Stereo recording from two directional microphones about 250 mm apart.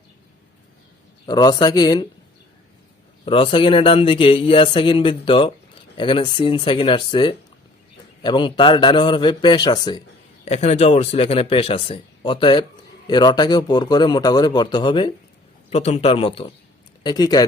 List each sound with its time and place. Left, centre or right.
1.3 s a man's voice: centre
3.2 s a man's voice: left